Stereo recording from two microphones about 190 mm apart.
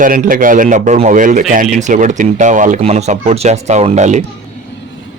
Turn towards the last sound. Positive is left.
turn(degrees=-40)  # may be behind; listen again after turning